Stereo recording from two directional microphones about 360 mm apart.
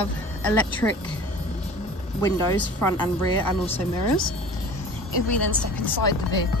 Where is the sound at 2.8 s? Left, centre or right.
Centre.